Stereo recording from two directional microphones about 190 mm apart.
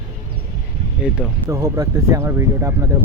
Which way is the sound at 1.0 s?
5° right (ahead or behind).